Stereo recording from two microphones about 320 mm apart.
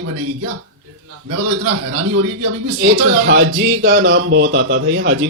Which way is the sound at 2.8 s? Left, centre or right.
Right.